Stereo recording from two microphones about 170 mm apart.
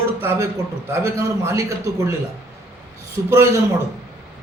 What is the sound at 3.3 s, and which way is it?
Speech, 15° right (ahead or behind).